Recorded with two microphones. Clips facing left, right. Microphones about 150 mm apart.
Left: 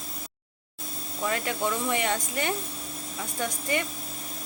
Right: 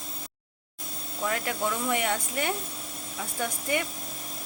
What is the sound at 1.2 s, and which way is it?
Speech, centre (ahead or behind).